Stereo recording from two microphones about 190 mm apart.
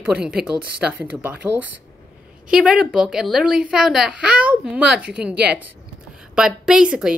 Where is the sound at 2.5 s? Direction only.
5° right (ahead or behind).